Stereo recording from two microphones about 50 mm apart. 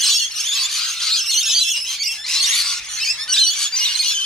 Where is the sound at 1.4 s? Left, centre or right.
Centre.